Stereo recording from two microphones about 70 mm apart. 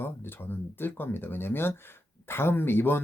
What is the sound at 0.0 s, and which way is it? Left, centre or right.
Speech, left.